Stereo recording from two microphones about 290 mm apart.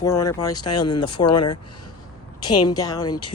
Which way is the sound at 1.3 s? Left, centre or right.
Left.